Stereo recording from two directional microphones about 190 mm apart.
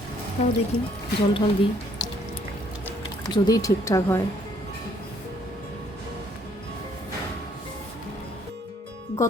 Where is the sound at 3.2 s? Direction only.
20° left (ahead or behind).